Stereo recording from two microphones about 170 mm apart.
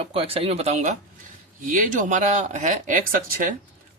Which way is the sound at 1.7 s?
50° right (ahead or behind).